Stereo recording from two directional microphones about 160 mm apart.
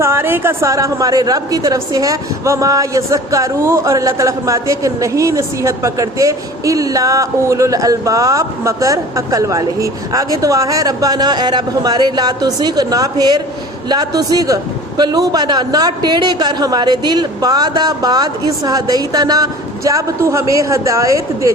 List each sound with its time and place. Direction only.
0.0 s a woman's voice: 15° right (ahead or behind)